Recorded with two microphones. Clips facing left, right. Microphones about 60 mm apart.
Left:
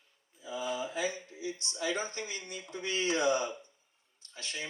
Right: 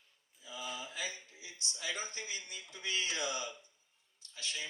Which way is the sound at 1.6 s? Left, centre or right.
Left.